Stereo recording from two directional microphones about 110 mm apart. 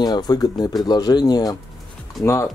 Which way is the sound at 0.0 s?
35° left (ahead or behind).